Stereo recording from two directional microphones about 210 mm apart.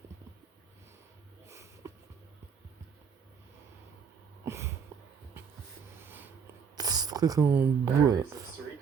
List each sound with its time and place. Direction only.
1.5 s sniff: 15° right (ahead or behind)
4.4 s a sound: 10° right (ahead or behind)
6.0 s writing: 10° right (ahead or behind)
6.7 s speech: 20° right (ahead or behind)